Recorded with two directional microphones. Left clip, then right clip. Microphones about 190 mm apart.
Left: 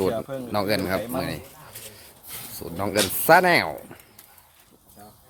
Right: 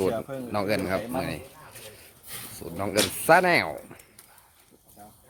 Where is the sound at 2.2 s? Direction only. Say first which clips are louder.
Left 1 dB; 25° right (ahead or behind).